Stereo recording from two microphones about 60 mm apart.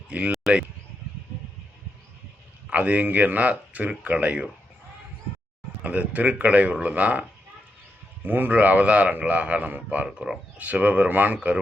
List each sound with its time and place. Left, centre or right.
0.1 s a man's voice: right
2.6 s a man's voice: right
5.8 s a man's voice: right
10.1 s speech: centre
10.6 s a man's voice: right